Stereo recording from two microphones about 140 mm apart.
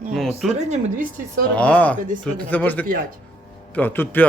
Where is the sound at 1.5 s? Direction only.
10° left (ahead or behind).